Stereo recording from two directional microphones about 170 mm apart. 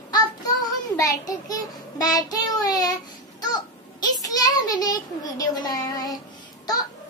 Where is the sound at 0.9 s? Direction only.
20° left (ahead or behind).